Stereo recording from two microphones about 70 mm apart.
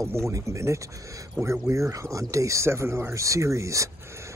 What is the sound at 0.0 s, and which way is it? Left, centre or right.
Speech, right.